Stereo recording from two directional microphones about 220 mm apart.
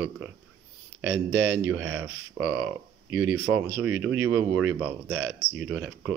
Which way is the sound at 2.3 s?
65° right (ahead or behind).